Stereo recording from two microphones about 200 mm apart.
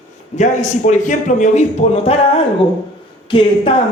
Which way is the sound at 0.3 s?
35° left (ahead or behind).